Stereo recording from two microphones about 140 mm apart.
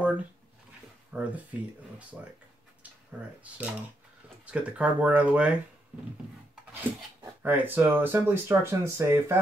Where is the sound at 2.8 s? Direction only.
10° right (ahead or behind).